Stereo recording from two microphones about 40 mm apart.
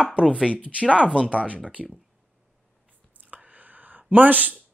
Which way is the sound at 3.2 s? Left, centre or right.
Right.